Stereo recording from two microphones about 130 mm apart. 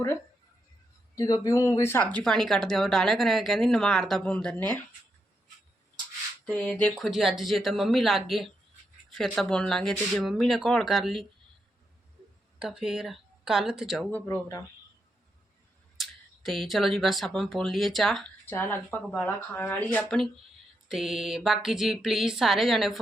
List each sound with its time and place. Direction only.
1.1 s speech: 25° left (ahead or behind)
6.4 s speech: 10° left (ahead or behind)
6.9 s speech: centre (ahead or behind)
12.5 s speech: 5° right (ahead or behind)
14.3 s speech: 25° left (ahead or behind)
16.0 s speech: centre (ahead or behind)
18.4 s speech: 15° left (ahead or behind)
20.0 s speech: centre (ahead or behind)